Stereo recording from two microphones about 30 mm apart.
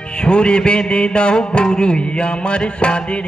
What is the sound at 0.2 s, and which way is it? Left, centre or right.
Music, left.